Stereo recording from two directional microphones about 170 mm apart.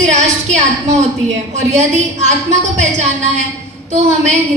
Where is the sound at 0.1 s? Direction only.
45° right (ahead or behind).